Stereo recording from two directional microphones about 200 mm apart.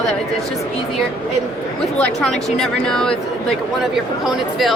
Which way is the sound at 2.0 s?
5° left (ahead or behind).